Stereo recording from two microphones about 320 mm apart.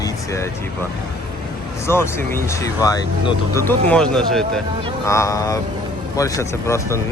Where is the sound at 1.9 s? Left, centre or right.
Centre.